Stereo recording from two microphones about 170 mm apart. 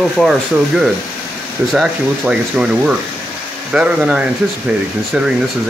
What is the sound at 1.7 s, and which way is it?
Speech, 5° right (ahead or behind).